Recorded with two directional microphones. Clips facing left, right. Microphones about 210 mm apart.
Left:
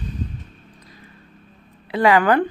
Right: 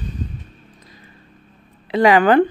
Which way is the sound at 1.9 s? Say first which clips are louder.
Right 3 dB; 20° right (ahead or behind).